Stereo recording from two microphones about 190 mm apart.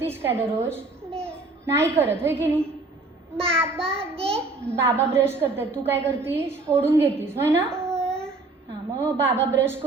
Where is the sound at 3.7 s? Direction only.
5° left (ahead or behind).